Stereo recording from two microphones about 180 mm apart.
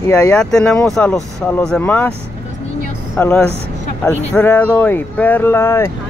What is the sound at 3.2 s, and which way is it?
Speech, 5° left (ahead or behind).